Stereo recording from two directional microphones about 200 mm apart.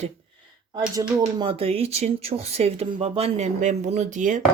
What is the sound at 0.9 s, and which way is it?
Speech, 20° right (ahead or behind).